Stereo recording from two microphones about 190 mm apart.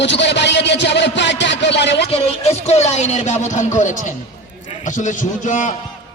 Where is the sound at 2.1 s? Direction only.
30° left (ahead or behind).